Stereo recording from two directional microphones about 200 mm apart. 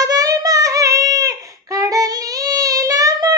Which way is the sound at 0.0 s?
15° right (ahead or behind).